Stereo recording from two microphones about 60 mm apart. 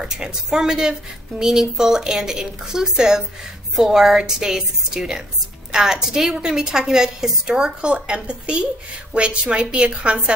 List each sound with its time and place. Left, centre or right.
0.0 s a woman's voice: centre